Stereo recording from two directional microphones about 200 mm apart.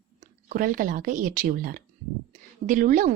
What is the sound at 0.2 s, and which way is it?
A woman's voice, 40° right (ahead or behind).